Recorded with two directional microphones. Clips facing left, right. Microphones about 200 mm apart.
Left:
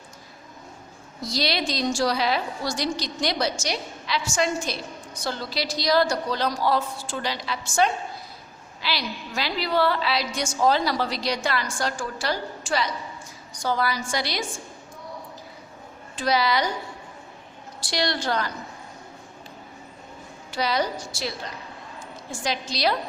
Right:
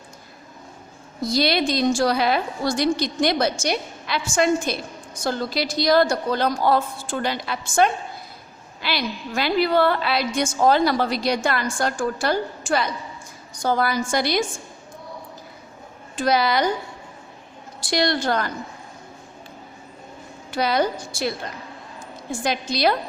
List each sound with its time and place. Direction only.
1.2 s a woman's voice: 55° right (ahead or behind)
16.1 s a woman's voice: 50° right (ahead or behind)
17.7 s a woman's voice: 50° right (ahead or behind)
20.5 s a woman's voice: 55° right (ahead or behind)